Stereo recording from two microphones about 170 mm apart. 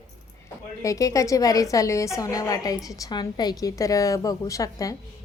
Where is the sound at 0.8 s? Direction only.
20° left (ahead or behind).